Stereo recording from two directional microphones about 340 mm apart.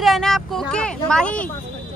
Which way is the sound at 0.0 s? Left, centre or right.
Centre.